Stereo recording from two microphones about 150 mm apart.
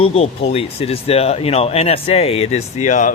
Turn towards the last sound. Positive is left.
turn(degrees=55)  # may be behind; listen again after turning